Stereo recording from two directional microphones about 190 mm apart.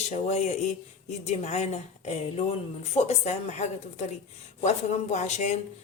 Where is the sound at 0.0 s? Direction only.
35° left (ahead or behind).